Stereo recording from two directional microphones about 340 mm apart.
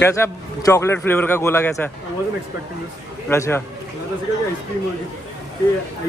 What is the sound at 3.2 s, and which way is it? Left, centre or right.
Speech, centre.